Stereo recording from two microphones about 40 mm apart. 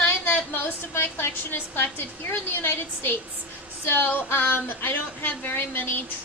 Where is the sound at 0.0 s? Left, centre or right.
Left.